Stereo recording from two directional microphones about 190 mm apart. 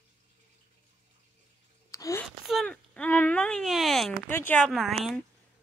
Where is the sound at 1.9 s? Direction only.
15° left (ahead or behind).